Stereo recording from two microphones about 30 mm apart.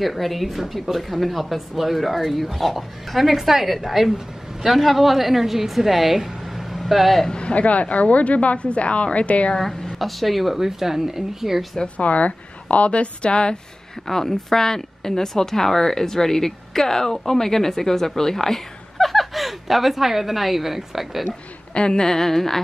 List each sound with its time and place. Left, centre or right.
0.0 s speech: centre
7.2 s speech: left
7.5 s speech: left
9.6 s a woman's voice: centre
9.9 s speech: centre
10.6 s speech: centre
12.0 s speech: left
14.0 s a woman's voice: centre
21.7 s a woman's voice: left
22.0 s a woman's voice: centre